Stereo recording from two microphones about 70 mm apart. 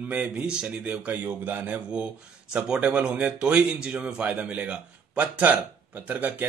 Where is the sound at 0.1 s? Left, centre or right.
Right.